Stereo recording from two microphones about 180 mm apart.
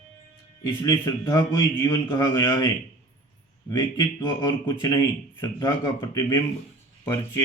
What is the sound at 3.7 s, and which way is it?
Speech, 25° left (ahead or behind).